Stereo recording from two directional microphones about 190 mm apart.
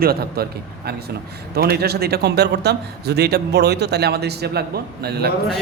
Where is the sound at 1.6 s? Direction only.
55° right (ahead or behind).